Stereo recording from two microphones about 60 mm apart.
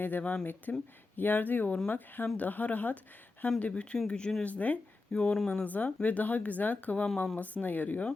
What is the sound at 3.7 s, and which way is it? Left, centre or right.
Speech, centre.